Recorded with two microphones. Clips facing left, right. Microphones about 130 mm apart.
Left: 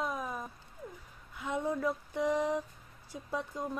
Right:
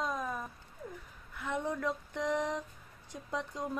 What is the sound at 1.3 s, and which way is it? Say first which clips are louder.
A woman's voice: left 2 dB; 10° left (ahead or behind).